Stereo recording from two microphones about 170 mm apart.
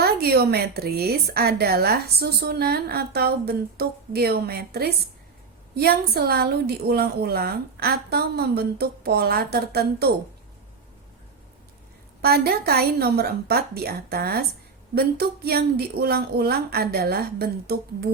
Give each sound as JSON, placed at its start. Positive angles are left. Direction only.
{"t": 0.0, "sound": "a woman's voice", "side_deg": -65}
{"t": 12.2, "sound": "a woman's voice", "side_deg": -65}